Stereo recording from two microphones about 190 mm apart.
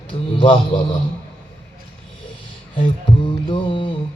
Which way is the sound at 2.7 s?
25° left (ahead or behind).